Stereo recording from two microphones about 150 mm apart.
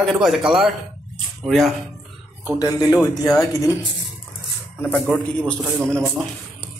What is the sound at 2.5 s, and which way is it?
Speech, 25° left (ahead or behind).